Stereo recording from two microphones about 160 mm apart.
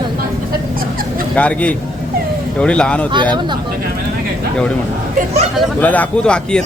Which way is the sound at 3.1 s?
30° right (ahead or behind).